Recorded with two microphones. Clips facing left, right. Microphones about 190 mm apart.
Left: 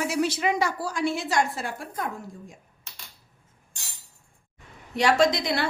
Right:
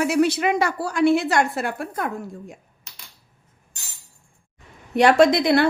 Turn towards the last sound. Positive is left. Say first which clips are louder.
# right 7 dB
turn(degrees=-55)  # may be behind; listen again after turning